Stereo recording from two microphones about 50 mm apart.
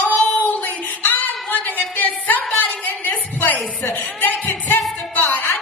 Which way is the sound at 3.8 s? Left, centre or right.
Left.